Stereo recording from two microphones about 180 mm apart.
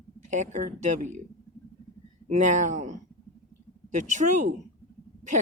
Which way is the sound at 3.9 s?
45° right (ahead or behind).